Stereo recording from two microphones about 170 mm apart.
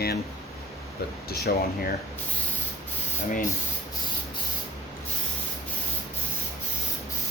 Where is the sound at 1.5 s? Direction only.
60° left (ahead or behind).